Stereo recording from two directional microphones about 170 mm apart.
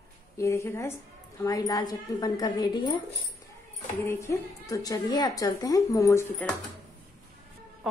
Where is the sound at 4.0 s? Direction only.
15° left (ahead or behind).